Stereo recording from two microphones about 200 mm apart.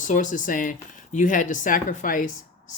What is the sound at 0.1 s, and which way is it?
Speech, 40° left (ahead or behind).